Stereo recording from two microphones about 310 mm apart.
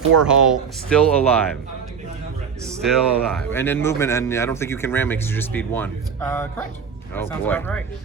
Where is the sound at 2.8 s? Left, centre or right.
Centre.